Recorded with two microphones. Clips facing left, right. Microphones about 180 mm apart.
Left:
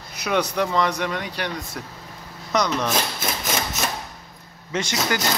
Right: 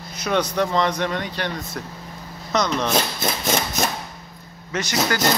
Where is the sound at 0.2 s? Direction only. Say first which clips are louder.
Right 1 dB; 5° left (ahead or behind).